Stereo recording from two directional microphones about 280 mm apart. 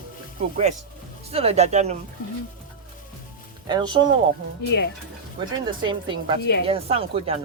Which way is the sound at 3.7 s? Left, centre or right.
Centre.